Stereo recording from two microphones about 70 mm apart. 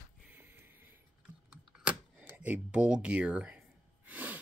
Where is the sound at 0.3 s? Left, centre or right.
Right.